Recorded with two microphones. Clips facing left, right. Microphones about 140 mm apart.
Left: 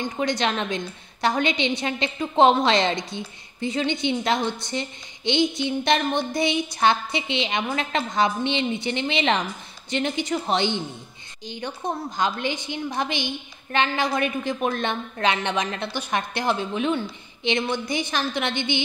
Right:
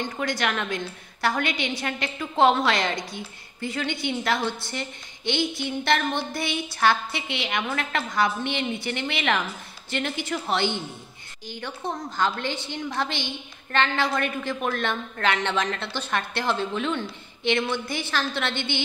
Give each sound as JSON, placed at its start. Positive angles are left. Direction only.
{"t": 0.0, "sound": "a woman's voice", "side_deg": 20}